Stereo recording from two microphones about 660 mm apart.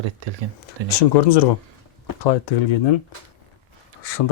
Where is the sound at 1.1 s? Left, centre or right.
Left.